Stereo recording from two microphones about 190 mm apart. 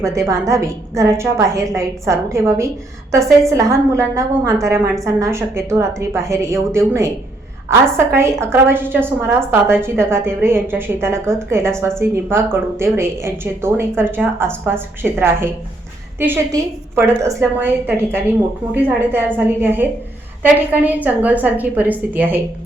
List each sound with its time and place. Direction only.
0.0 s a woman's voice: 15° right (ahead or behind)